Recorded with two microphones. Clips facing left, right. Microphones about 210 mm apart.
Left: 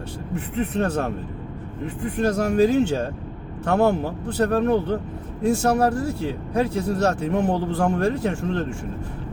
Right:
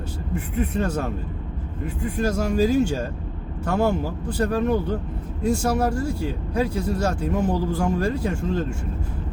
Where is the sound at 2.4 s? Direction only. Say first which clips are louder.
Left 2 dB; 60° left (ahead or behind).